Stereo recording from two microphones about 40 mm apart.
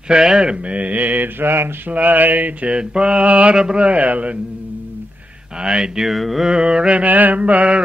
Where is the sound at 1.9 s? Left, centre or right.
Right.